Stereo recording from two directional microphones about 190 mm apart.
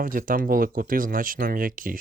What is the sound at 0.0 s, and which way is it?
Speech, 45° right (ahead or behind).